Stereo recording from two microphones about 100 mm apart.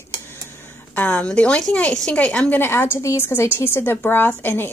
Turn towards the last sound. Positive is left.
turn(degrees=20)  # may be behind; listen again after turning